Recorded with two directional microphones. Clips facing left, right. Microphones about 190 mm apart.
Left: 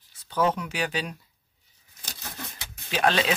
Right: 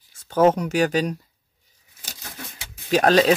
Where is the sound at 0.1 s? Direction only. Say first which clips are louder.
Right 8 dB; 45° right (ahead or behind).